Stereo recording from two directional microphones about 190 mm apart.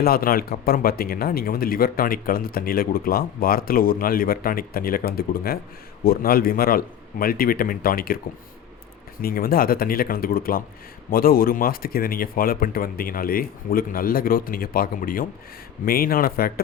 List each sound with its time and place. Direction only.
0.0 s speech: 50° left (ahead or behind)
9.2 s speech: 50° left (ahead or behind)